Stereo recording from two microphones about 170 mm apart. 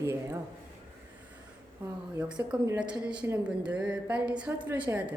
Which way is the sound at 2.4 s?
15° right (ahead or behind).